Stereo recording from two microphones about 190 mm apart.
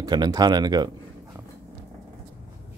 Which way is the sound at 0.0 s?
20° right (ahead or behind).